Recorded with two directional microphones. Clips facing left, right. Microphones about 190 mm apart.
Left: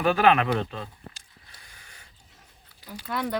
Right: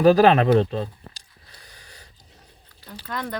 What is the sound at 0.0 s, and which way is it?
Speech, 35° right (ahead or behind).